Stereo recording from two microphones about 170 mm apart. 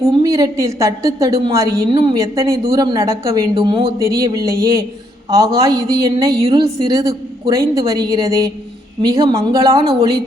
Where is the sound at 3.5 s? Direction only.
30° right (ahead or behind).